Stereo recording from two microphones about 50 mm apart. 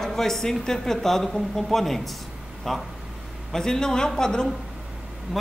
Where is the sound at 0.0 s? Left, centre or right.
Centre.